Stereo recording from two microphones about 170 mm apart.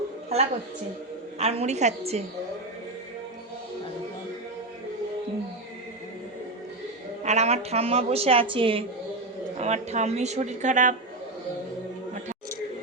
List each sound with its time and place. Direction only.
0.3 s a woman's voice: 35° right (ahead or behind)
7.3 s a woman's voice: 40° right (ahead or behind)